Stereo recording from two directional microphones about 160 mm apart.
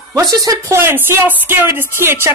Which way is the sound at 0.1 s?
20° right (ahead or behind).